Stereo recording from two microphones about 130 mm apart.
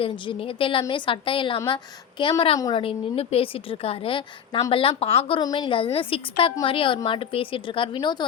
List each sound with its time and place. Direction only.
0.0 s a woman's voice: 45° left (ahead or behind)
5.4 s a woman's voice: 35° left (ahead or behind)